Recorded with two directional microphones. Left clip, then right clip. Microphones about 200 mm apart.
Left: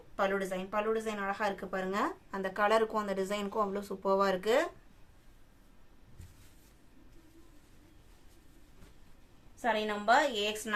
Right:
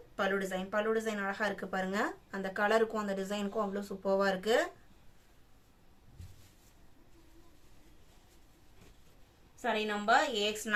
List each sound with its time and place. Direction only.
0.2 s speech: 15° left (ahead or behind)
9.6 s speech: 25° left (ahead or behind)